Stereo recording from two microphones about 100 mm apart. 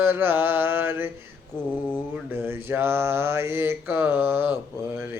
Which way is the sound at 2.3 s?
25° right (ahead or behind).